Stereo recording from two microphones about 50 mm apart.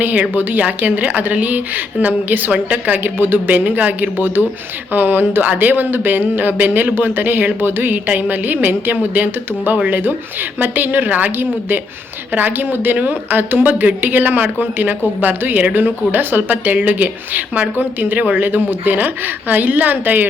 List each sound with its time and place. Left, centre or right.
0.0 s speech: right